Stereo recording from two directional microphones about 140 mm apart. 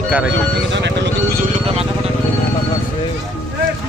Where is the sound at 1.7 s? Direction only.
45° right (ahead or behind).